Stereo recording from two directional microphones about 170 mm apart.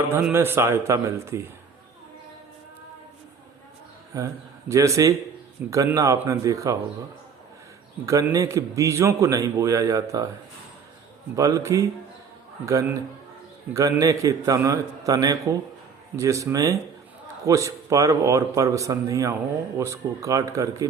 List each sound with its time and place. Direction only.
0.1 s speech: 10° right (ahead or behind)
4.1 s a man's voice: 20° right (ahead or behind)
8.0 s a man's voice: 20° right (ahead or behind)
11.3 s a man's voice: 20° right (ahead or behind)